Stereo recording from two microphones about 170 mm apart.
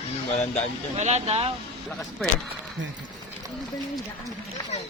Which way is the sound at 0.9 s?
40° right (ahead or behind).